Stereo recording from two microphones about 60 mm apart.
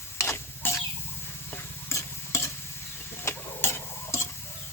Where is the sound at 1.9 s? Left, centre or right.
Left.